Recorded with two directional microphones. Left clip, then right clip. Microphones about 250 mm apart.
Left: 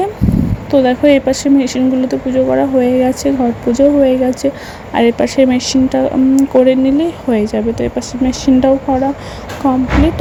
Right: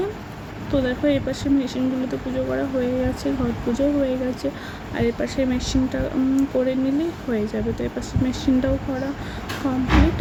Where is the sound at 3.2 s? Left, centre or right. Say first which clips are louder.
Left 10 dB; left.